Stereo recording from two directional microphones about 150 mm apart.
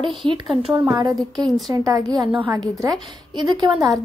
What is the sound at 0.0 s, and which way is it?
A woman's voice, 35° right (ahead or behind).